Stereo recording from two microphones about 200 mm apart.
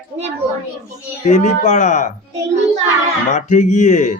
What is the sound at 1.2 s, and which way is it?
Speech, 35° left (ahead or behind).